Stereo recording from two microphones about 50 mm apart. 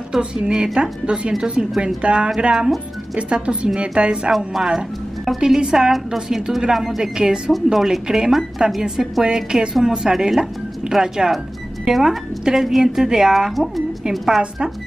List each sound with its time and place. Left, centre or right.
0.7 s a woman's voice: centre
4.7 s music: centre
5.4 s a woman's voice: centre